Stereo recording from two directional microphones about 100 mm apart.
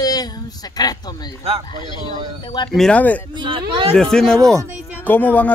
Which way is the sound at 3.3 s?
55° right (ahead or behind).